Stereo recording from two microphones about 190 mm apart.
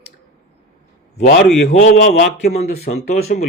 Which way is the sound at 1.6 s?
60° left (ahead or behind).